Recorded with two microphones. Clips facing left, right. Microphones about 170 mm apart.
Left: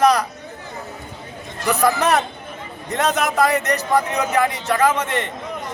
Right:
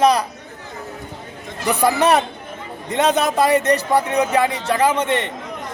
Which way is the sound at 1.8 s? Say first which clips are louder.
Right 2 dB; 30° right (ahead or behind).